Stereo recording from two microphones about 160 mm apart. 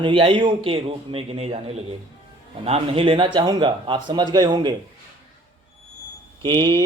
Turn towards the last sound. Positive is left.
turn(degrees=-25)  # may be behind; listen again after turning